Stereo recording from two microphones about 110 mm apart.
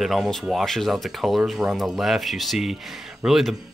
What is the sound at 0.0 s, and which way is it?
Speech, centre (ahead or behind).